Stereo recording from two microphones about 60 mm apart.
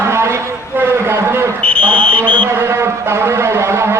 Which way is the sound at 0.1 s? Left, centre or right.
Right.